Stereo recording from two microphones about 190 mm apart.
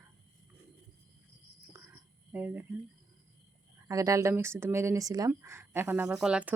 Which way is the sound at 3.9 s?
15° right (ahead or behind).